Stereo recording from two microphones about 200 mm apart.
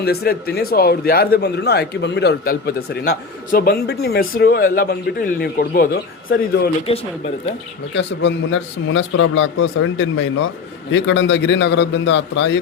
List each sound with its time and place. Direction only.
0.0 s a man's voice: 50° left (ahead or behind)
6.9 s speech: 30° left (ahead or behind)
7.9 s a man's voice: 60° left (ahead or behind)